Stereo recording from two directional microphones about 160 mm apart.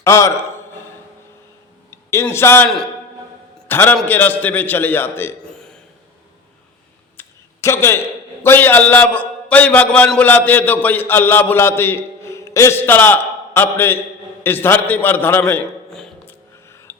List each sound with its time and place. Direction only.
0.0 s a man's voice: 20° left (ahead or behind)
1.9 s a man's voice: 15° left (ahead or behind)
3.7 s a man's voice: 15° left (ahead or behind)
5.5 s burping: 5° left (ahead or behind)
7.2 s a sound: 15° left (ahead or behind)
8.4 s a man's voice: 15° left (ahead or behind)
16.2 s a sound: 15° left (ahead or behind)